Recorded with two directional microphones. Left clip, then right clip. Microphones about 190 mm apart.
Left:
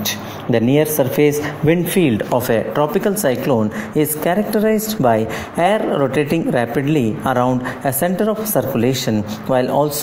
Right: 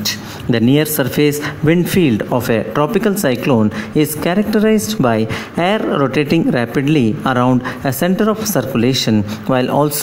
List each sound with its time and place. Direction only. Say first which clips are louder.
0.0 s speech: right 2 dB; 30° right (ahead or behind)